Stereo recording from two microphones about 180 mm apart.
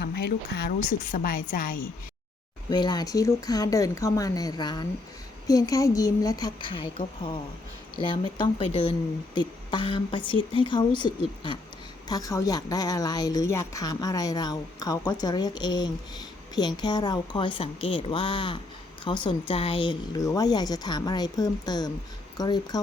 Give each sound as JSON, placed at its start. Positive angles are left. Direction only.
{"t": 0.0, "sound": "a woman's voice", "side_deg": 65}
{"t": 2.6, "sound": "a woman's voice", "side_deg": 25}